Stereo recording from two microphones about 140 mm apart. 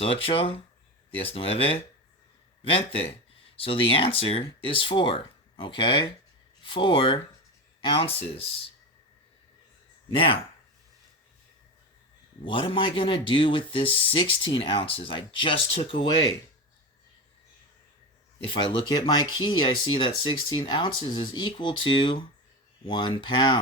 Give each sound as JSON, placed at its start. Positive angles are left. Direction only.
{"t": 0.0, "sound": "speech", "side_deg": 40}
{"t": 10.2, "sound": "speech", "side_deg": 40}
{"t": 12.5, "sound": "speech", "side_deg": 35}
{"t": 18.4, "sound": "speech", "side_deg": 40}